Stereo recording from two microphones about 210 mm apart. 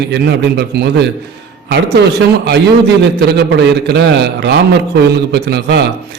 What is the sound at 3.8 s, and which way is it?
Speech, 50° right (ahead or behind).